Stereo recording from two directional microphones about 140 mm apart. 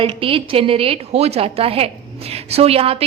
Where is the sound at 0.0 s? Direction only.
40° right (ahead or behind).